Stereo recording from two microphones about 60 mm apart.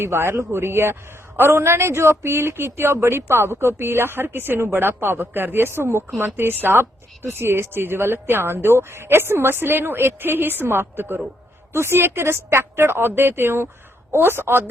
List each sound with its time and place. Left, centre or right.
0.0 s speech: right